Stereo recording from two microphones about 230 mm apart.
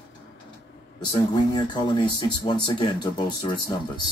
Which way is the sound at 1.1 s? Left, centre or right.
Centre.